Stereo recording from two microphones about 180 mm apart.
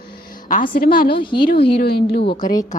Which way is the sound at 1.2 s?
25° left (ahead or behind).